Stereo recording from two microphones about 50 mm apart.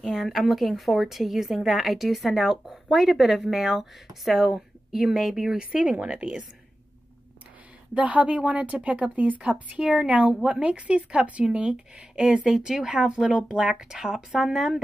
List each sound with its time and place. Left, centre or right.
0.0 s a woman's voice: centre
5.6 s speech: centre
7.9 s speech: right; by 14.8 s centre